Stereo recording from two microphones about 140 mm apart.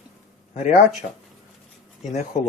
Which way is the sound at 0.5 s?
55° left (ahead or behind).